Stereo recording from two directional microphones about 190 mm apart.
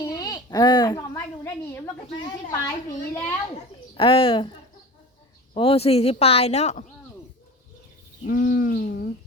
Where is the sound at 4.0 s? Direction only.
25° left (ahead or behind).